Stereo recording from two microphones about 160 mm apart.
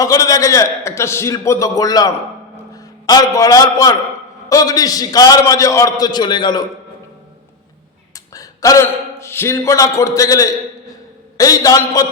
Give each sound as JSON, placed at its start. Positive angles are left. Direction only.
{"t": 0.0, "sound": "a man's voice", "side_deg": 20}
{"t": 8.1, "sound": "a man's voice", "side_deg": 20}